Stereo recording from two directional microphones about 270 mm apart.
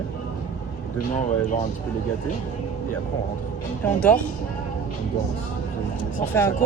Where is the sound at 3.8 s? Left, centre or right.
Centre.